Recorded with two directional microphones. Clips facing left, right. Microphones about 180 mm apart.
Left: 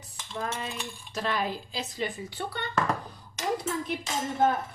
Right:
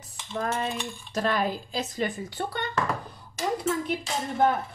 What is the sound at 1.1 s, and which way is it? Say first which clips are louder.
A woman's voice: right 4 dB; 45° right (ahead or behind).